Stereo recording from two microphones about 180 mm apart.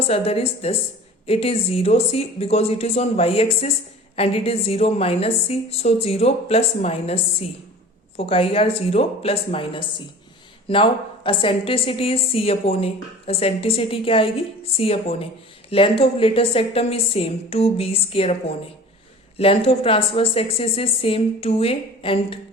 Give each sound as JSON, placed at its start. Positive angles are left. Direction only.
{"t": 0.1, "sound": "a woman's voice", "side_deg": 35}
{"t": 19.4, "sound": "a woman's voice", "side_deg": 30}